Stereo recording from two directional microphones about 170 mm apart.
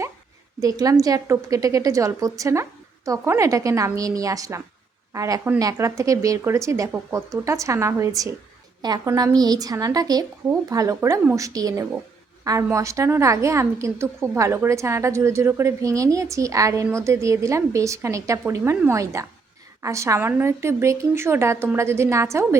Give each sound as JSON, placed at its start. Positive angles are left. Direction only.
{"t": 0.6, "sound": "a woman's voice", "side_deg": -20}